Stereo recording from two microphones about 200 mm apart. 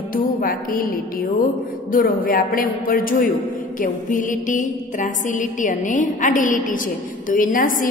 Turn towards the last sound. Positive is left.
turn(degrees=40)  # may be behind; listen again after turning